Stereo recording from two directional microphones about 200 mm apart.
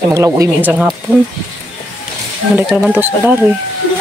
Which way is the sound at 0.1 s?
15° right (ahead or behind).